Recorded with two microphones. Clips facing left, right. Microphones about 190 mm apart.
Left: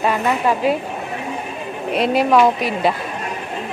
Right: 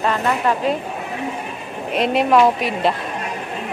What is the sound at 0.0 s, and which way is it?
Speech, 10° left (ahead or behind).